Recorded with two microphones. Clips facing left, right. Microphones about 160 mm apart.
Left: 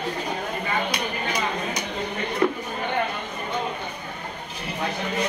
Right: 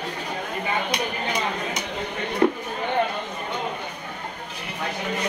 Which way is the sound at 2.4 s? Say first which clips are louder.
Right 3 dB; 25° right (ahead or behind).